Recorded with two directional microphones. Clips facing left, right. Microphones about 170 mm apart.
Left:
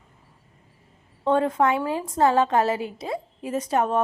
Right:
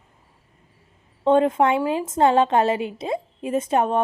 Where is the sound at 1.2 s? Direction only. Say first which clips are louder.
Right 3 dB; 20° right (ahead or behind).